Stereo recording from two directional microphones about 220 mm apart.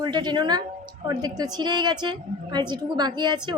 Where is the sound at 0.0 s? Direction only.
20° right (ahead or behind).